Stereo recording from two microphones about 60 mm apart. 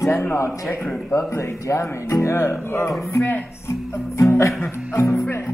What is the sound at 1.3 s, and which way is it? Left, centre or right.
Speech, left.